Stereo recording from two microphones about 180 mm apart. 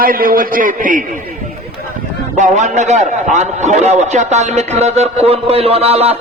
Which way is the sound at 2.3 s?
40° right (ahead or behind).